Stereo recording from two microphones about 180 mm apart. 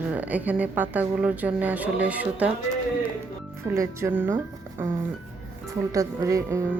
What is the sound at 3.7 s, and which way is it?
Speech, 15° right (ahead or behind).